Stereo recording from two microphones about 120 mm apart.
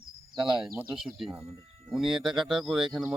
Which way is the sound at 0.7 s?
25° right (ahead or behind).